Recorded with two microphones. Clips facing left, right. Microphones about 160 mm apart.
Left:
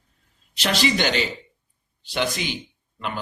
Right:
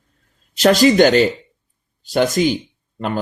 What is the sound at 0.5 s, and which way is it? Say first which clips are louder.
Speech: right 11 dB; 40° right (ahead or behind).